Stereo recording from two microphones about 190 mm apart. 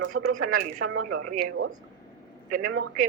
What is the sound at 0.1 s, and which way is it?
Speech, 90° right.